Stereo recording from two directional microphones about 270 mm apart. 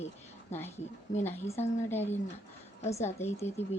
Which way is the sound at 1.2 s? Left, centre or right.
Centre.